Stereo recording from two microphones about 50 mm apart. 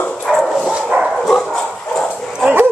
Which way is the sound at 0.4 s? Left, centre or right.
Centre.